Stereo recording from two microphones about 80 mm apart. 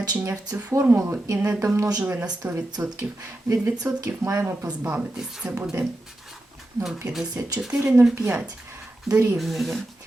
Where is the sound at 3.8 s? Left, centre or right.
Right.